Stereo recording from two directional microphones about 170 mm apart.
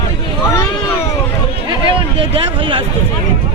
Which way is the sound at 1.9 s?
30° right (ahead or behind).